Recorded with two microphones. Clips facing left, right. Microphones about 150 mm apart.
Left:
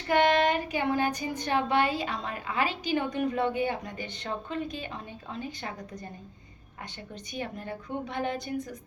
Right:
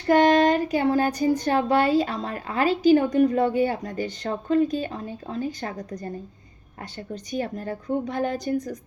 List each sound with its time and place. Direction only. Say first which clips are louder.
0.1 s speech: right 6 dB; 40° right (ahead or behind)
7.1 s speech: right 8 dB; 40° right (ahead or behind)